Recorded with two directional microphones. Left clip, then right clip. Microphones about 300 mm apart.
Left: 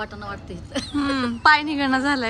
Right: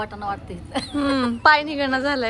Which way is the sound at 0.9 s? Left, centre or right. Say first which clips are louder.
Right 2 dB; centre.